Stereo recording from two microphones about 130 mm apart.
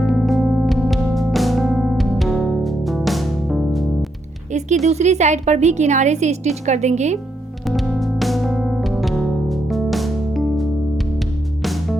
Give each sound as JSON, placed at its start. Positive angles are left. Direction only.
{"t": 0.0, "sound": "music", "side_deg": 0}
{"t": 4.9, "sound": "a woman's voice", "side_deg": -60}
{"t": 7.6, "sound": "music", "side_deg": 0}